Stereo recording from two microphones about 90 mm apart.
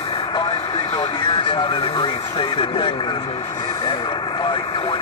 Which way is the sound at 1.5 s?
65° left (ahead or behind).